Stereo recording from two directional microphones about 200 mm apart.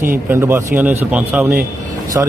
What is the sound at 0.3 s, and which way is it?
A man's voice, 10° right (ahead or behind).